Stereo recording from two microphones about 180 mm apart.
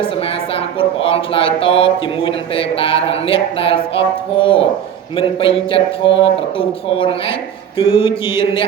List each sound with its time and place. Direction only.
0.0 s speech: 30° left (ahead or behind)